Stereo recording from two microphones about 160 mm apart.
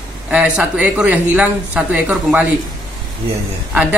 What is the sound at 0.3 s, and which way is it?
Speech, 10° right (ahead or behind).